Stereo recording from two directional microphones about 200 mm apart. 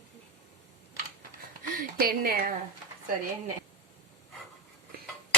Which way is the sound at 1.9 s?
50° right (ahead or behind).